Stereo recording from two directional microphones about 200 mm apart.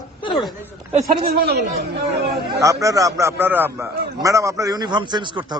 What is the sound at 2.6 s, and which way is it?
A man's voice, 15° right (ahead or behind).